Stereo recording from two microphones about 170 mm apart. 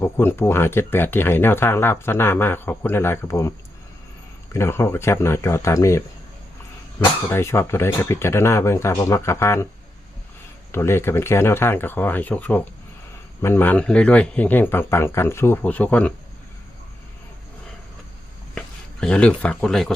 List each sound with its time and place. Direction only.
0.0 s speech: 15° left (ahead or behind)
4.5 s speech: 15° left (ahead or behind)
7.3 s speech: 15° left (ahead or behind)
10.7 s speech: 15° left (ahead or behind)
18.5 s speech: 5° left (ahead or behind)